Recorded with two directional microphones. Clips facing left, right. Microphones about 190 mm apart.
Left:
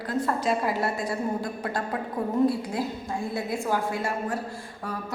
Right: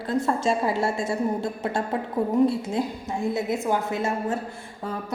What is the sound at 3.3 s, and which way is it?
A woman's voice, 20° right (ahead or behind).